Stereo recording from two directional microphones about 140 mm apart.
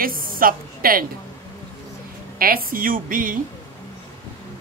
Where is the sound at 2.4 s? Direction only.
90° right.